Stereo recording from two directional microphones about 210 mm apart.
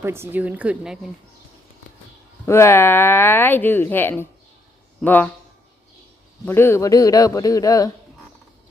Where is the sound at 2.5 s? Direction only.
10° left (ahead or behind).